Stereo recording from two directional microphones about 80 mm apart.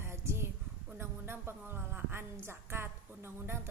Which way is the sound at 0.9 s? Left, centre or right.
Right.